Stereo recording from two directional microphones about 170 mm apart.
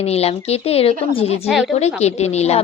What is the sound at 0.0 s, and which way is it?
A woman's voice, 35° left (ahead or behind).